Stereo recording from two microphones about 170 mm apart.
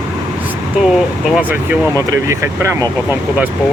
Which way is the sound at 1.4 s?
10° right (ahead or behind).